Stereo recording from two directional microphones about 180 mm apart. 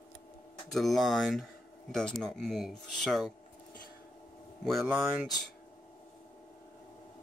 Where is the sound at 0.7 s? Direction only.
Centre (ahead or behind).